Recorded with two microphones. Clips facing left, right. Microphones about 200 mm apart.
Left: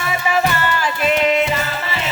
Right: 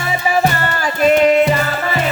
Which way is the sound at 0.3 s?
45° right (ahead or behind).